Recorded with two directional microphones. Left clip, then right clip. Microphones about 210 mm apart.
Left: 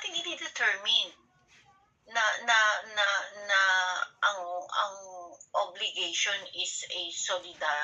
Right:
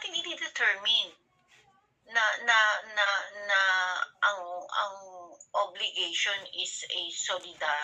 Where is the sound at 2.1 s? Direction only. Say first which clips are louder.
Right 1 dB; 25° right (ahead or behind).